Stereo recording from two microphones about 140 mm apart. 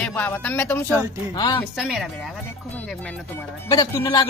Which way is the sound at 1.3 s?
30° left (ahead or behind).